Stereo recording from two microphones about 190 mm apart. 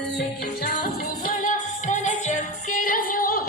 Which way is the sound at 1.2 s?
45° left (ahead or behind).